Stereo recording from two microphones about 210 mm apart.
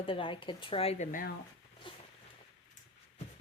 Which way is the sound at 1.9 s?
25° left (ahead or behind).